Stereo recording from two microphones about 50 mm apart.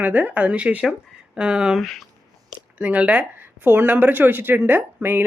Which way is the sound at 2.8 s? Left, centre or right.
Right.